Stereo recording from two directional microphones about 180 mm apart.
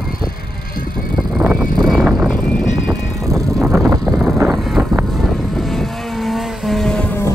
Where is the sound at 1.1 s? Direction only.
5° right (ahead or behind).